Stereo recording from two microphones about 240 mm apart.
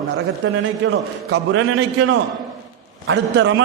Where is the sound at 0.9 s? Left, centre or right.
Right.